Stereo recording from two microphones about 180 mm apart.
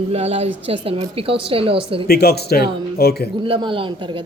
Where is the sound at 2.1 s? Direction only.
60° left (ahead or behind).